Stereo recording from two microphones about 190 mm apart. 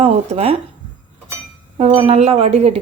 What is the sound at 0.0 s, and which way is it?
Speech, 35° right (ahead or behind).